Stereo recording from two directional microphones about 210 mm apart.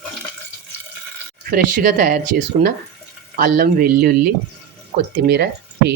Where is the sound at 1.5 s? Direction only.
40° right (ahead or behind).